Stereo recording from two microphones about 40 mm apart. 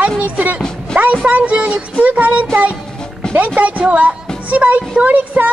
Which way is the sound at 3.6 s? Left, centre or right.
Right.